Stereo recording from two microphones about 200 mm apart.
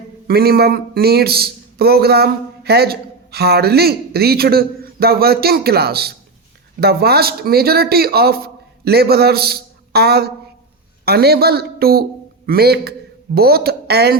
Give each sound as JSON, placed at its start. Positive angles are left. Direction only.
{"t": 0.3, "sound": "a man's voice", "side_deg": -50}